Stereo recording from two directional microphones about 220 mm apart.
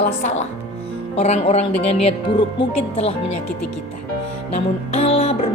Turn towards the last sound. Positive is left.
turn(degrees=25)  # may be behind; listen again after turning